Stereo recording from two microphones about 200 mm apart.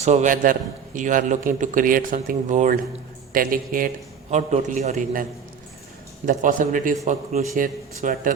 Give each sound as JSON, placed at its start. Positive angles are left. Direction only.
{"t": 0.0, "sound": "a man's voice", "side_deg": -35}
{"t": 6.2, "sound": "a man's voice", "side_deg": -40}